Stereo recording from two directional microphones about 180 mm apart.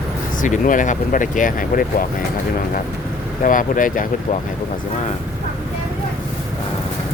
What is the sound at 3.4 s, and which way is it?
Speech, 50° left (ahead or behind).